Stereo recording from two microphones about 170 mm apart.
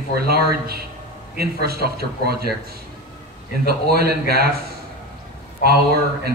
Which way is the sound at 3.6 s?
65° right (ahead or behind).